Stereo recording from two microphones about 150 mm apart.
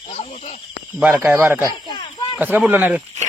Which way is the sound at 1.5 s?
15° right (ahead or behind).